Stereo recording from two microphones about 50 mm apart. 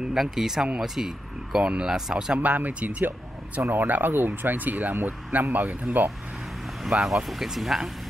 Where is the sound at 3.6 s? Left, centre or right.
Right.